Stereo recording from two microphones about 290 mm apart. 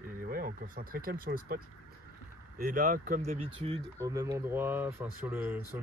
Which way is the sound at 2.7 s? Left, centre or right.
Right.